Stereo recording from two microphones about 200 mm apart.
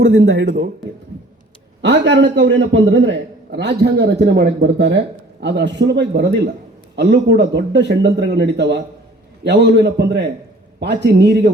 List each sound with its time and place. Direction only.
0.0 s a man's voice: 60° right (ahead or behind)
1.8 s a man's voice: 65° right (ahead or behind)